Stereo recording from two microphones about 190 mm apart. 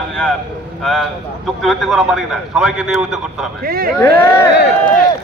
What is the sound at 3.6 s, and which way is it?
Speech, 50° right (ahead or behind).